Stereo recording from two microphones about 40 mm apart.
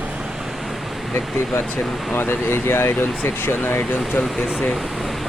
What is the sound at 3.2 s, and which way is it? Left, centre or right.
Speech, left.